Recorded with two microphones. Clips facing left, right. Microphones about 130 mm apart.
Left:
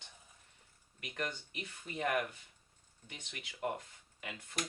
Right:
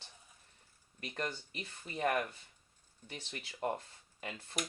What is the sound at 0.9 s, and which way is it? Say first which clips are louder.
Speech: right 1 dB; 35° right (ahead or behind).